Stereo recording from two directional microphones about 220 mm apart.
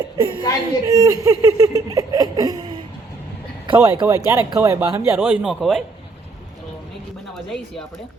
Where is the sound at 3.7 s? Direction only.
15° right (ahead or behind); by 5.8 s centre (ahead or behind).